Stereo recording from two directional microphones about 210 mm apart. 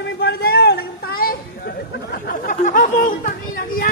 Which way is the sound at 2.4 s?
40° left (ahead or behind).